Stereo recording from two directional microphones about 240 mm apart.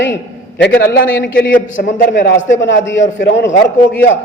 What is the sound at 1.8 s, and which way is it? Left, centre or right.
Speech, left.